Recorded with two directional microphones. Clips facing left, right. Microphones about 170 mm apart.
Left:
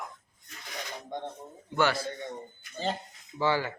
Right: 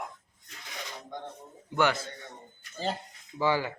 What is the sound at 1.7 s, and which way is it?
Speech, 20° right (ahead or behind).